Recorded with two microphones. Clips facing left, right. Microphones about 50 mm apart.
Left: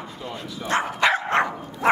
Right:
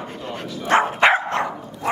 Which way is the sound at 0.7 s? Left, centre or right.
Right.